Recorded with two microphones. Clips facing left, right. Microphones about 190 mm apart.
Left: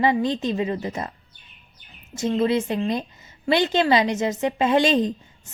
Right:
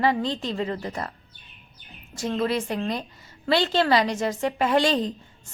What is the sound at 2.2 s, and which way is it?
A woman's voice, 20° left (ahead or behind).